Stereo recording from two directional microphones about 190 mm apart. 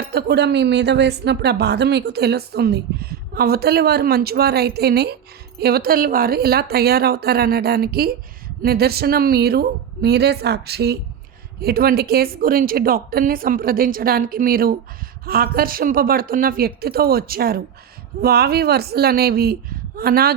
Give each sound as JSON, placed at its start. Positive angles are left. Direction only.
{"t": 0.1, "sound": "a woman's voice", "side_deg": -55}